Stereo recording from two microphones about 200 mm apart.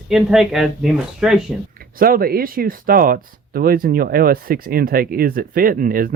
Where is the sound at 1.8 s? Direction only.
45° right (ahead or behind).